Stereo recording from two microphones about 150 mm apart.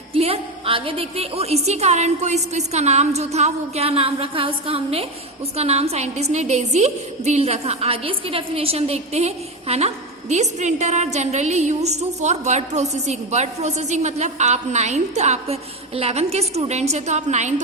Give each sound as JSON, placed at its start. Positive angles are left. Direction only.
{"t": 0.1, "sound": "a woman's voice", "side_deg": -40}